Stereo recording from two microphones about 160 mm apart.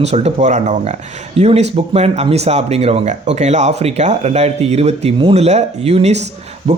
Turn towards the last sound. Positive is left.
turn(degrees=-45)  # may be behind; listen again after turning